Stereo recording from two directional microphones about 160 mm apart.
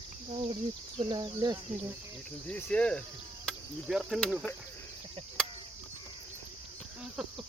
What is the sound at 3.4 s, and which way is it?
Cricket, centre (ahead or behind).